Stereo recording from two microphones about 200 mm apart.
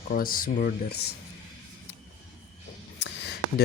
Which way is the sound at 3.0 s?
55° left (ahead or behind).